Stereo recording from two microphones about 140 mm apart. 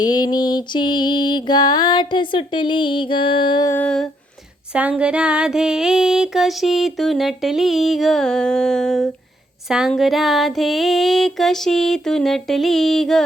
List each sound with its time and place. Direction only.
0.0 s music: 30° left (ahead or behind)
3.7 s humming: 10° left (ahead or behind)
4.7 s a sound: 10° right (ahead or behind)